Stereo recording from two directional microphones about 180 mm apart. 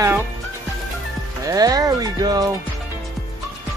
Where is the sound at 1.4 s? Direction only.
20° right (ahead or behind).